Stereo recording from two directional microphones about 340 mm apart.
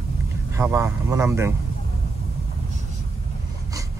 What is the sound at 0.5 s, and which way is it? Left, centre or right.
Speech, centre.